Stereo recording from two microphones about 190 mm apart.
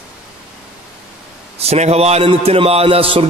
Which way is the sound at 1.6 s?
35° right (ahead or behind).